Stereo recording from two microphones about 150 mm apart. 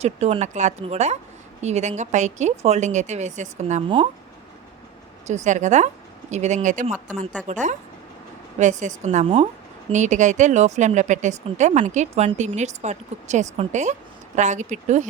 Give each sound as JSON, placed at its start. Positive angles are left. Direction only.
{"t": 0.0, "sound": "a woman's voice", "side_deg": -45}
{"t": 3.8, "sound": "speech", "side_deg": -35}
{"t": 5.2, "sound": "a woman's voice", "side_deg": -50}
{"t": 9.2, "sound": "speech", "side_deg": -40}
{"t": 9.9, "sound": "a woman's voice", "side_deg": -55}